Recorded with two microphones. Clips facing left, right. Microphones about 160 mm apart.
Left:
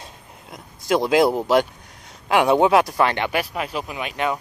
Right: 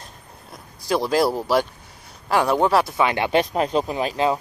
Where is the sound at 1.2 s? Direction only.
20° left (ahead or behind).